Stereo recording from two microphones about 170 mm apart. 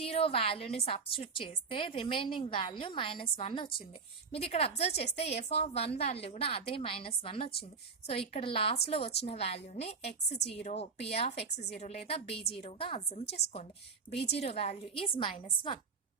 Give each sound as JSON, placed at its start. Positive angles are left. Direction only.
{"t": 0.0, "sound": "a woman's voice", "side_deg": 35}